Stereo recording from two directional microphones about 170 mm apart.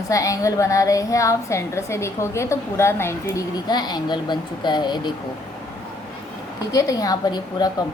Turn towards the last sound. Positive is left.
turn(degrees=25)  # may be behind; listen again after turning